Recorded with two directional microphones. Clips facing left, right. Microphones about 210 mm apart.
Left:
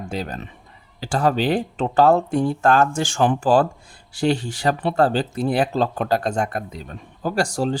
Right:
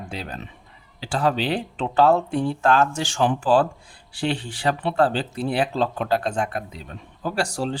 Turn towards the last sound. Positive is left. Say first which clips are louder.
# left 3 dB
turn(degrees=45)  # may be behind; listen again after turning